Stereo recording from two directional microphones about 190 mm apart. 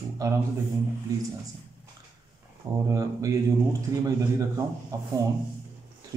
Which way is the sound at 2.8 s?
15° right (ahead or behind).